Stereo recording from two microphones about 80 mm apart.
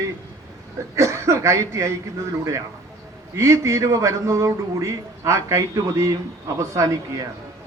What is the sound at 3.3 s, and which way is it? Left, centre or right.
A man's voice, right.